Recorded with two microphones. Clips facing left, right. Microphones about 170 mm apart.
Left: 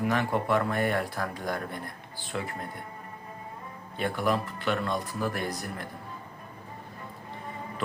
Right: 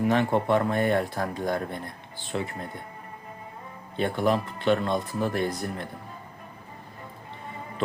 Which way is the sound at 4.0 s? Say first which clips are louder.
Right 3 dB; 25° right (ahead or behind).